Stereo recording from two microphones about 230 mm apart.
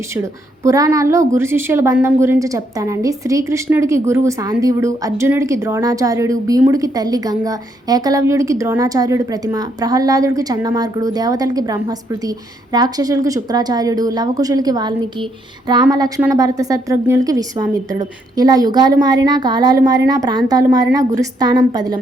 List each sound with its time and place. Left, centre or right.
0.2 s a woman's voice: centre